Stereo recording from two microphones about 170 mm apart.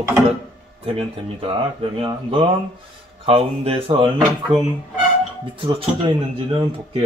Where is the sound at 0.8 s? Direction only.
35° right (ahead or behind).